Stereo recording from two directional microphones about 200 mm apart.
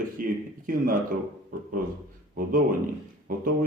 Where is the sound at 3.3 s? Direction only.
45° right (ahead or behind).